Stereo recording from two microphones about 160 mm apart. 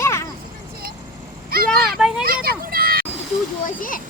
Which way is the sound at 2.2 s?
70° right (ahead or behind).